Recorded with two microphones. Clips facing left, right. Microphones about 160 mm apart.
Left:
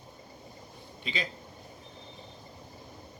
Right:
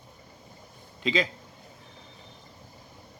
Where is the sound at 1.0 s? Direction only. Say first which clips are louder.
Right 10 dB; 90° right.